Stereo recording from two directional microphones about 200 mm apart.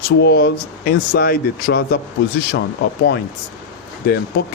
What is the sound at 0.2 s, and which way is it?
Speech, 55° left (ahead or behind).